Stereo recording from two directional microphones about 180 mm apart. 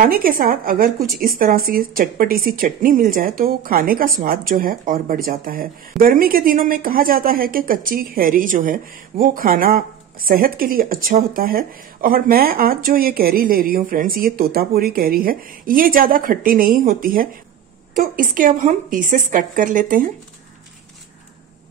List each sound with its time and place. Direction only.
0.0 s speech: 55° right (ahead or behind)